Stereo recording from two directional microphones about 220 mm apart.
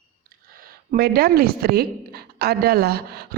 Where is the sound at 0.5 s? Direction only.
40° right (ahead or behind).